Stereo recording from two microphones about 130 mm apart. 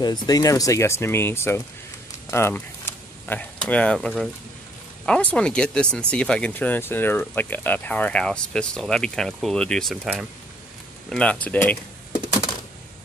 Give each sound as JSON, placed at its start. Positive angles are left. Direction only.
{"t": 0.0, "sound": "speech", "side_deg": 30}